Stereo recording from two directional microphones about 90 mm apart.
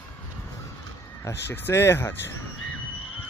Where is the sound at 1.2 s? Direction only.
25° left (ahead or behind).